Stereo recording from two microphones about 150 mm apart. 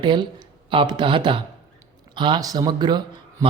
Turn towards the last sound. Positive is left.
turn(degrees=-30)  # may be behind; listen again after turning